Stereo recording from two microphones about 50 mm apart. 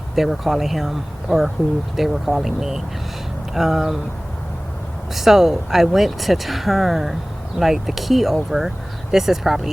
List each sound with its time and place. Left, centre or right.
0.2 s speech: centre
5.1 s speech: centre